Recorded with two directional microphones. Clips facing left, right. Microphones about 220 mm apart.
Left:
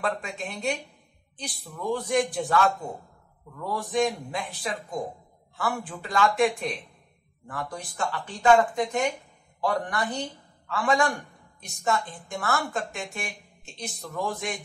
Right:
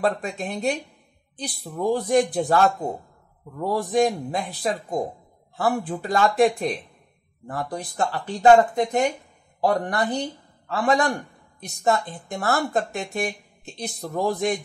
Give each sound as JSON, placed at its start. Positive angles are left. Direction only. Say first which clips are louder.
{"t": 0.2, "sound": "speech", "louder": "right 6 dB", "side_deg": -35}